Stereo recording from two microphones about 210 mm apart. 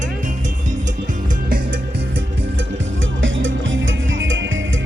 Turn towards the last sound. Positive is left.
turn(degrees=-70)  # may be behind; listen again after turning